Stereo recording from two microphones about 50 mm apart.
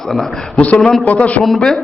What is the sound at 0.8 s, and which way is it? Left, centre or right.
Speech, centre.